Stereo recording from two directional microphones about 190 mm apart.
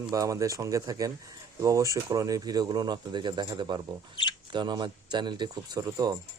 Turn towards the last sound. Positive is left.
turn(degrees=-20)  # may be behind; listen again after turning